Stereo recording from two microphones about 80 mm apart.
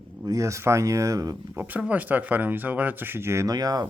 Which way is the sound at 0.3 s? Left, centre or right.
Right.